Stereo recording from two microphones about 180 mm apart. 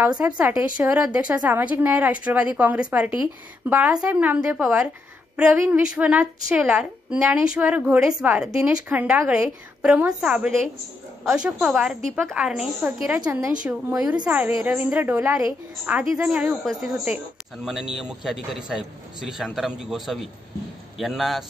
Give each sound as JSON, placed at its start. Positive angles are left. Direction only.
{"t": 0.1, "sound": "speech", "side_deg": -25}
{"t": 0.4, "sound": "a woman's voice", "side_deg": -5}